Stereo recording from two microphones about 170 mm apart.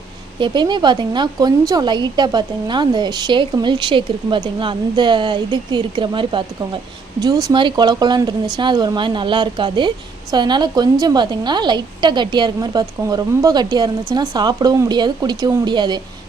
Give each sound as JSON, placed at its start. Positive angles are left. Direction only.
{"t": 0.3, "sound": "speech", "side_deg": -25}
{"t": 7.4, "sound": "speech", "side_deg": -25}